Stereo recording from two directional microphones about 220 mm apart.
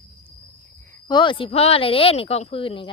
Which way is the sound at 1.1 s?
20° left (ahead or behind).